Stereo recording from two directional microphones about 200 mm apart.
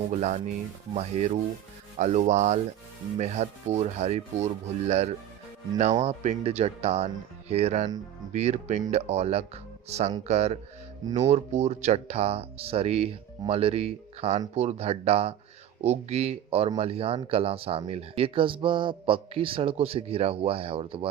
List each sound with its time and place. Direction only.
0.1 s speech: 35° right (ahead or behind)